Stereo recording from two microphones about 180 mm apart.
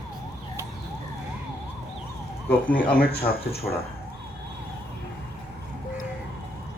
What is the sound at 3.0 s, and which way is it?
Speech, 60° left (ahead or behind).